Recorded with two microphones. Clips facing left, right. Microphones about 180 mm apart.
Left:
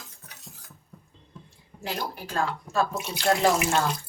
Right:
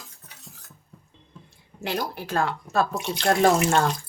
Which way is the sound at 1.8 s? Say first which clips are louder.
Right 4 dB; 70° right (ahead or behind).